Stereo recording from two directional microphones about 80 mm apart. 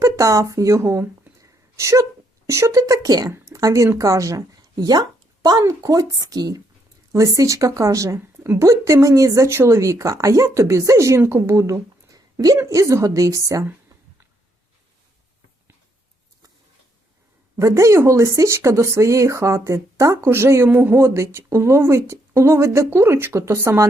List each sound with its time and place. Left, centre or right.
0.0 s a woman's voice: right
17.6 s speech: right